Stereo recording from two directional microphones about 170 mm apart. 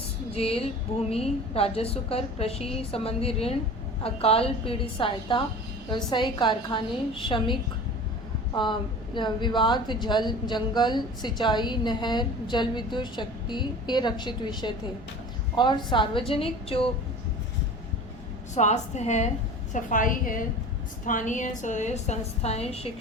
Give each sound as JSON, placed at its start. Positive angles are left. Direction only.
{"t": 0.3, "sound": "a woman's voice", "side_deg": 35}
{"t": 9.1, "sound": "a woman's voice", "side_deg": 25}
{"t": 18.5, "sound": "a woman's voice", "side_deg": 40}